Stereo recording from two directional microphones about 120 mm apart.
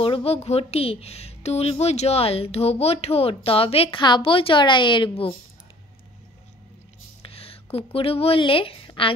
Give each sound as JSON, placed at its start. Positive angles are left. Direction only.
{"t": 0.0, "sound": "speech", "side_deg": 50}
{"t": 7.2, "sound": "a woman's voice", "side_deg": 55}